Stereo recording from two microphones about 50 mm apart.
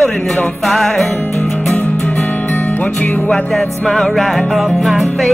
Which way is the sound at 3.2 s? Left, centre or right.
Centre.